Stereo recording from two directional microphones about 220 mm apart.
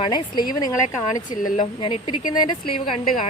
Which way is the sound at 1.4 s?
35° left (ahead or behind).